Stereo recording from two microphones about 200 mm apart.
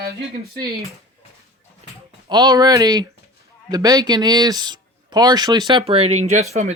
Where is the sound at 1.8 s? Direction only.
30° right (ahead or behind).